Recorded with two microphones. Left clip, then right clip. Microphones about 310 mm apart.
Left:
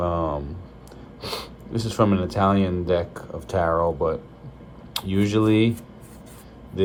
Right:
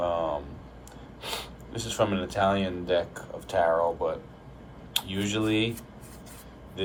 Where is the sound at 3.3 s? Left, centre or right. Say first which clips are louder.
Left 2 dB; left.